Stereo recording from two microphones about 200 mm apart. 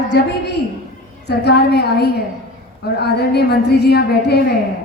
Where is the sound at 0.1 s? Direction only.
60° left (ahead or behind).